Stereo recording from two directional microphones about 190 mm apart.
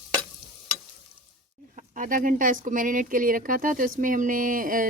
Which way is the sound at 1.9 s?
45° right (ahead or behind).